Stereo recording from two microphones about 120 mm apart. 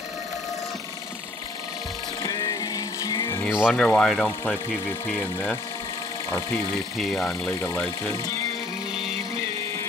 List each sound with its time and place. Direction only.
2.2 s music: 30° left (ahead or behind)
3.4 s speech: 5° right (ahead or behind)
3.7 s speech: 10° left (ahead or behind)
7.0 s speech: centre (ahead or behind)